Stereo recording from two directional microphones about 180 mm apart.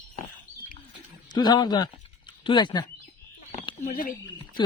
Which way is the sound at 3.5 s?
35° left (ahead or behind).